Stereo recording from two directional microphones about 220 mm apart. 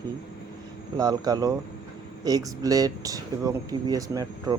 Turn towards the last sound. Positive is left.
turn(degrees=-15)  # may be behind; listen again after turning